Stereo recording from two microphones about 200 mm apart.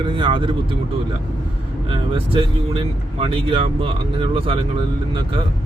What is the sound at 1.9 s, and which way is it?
Speech, 25° right (ahead or behind).